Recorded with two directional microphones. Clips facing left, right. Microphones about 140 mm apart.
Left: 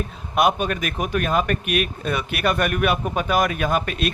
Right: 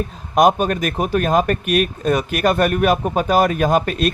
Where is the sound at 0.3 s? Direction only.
40° right (ahead or behind).